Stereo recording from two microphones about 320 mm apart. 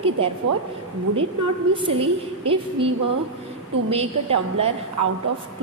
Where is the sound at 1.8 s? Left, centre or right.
Centre.